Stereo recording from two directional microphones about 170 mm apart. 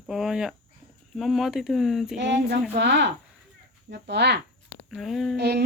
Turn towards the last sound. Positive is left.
turn(degrees=-75)  # may be behind; listen again after turning